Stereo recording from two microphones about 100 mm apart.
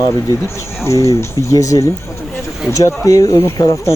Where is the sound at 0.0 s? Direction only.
35° left (ahead or behind).